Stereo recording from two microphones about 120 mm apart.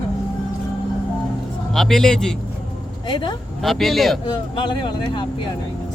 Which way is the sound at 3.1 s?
35° left (ahead or behind).